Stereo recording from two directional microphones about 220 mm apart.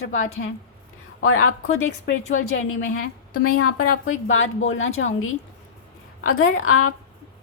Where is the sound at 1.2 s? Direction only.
75° left (ahead or behind).